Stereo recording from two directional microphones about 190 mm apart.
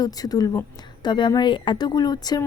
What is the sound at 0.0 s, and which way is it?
A woman's voice, 20° left (ahead or behind).